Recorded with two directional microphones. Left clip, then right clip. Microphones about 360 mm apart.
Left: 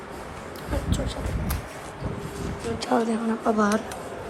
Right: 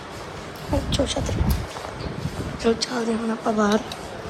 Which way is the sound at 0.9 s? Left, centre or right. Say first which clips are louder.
Right 7 dB; right.